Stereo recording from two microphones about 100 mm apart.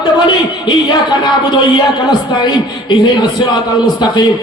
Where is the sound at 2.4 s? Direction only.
45° left (ahead or behind).